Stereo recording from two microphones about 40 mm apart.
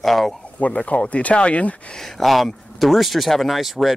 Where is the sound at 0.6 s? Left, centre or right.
Left.